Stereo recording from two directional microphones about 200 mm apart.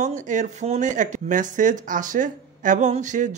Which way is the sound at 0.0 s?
40° right (ahead or behind).